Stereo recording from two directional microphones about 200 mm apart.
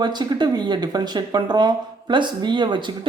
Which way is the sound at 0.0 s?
20° right (ahead or behind).